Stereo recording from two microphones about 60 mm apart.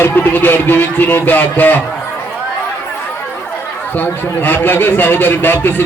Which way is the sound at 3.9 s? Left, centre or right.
Left.